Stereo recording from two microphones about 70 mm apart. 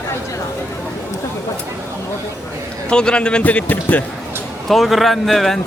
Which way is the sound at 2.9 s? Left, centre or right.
Centre.